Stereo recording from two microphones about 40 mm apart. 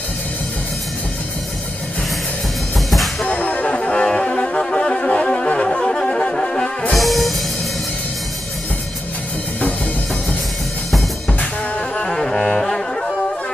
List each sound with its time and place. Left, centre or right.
2.9 s music: centre
3.3 s music: left
3.9 s music: left
6.9 s music: centre
12.0 s music: centre